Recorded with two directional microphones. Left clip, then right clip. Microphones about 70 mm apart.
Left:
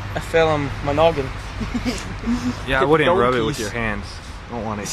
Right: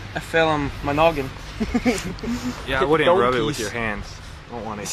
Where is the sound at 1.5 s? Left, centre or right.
Right.